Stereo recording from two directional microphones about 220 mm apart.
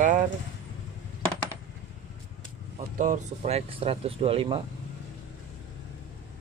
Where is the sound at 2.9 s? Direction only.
35° right (ahead or behind).